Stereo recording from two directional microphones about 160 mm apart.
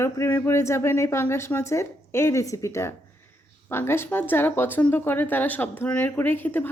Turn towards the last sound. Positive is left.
turn(degrees=10)  # may be behind; listen again after turning